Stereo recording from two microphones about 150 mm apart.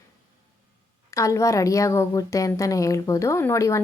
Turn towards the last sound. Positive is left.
turn(degrees=20)  # may be behind; listen again after turning